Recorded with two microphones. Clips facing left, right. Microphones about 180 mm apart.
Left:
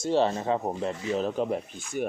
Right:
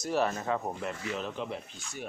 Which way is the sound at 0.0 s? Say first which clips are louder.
Left 5 dB; 30° left (ahead or behind).